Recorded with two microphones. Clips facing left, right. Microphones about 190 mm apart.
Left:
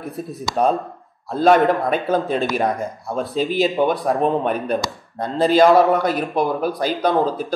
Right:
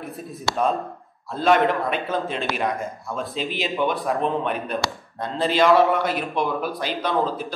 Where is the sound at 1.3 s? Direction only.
40° left (ahead or behind).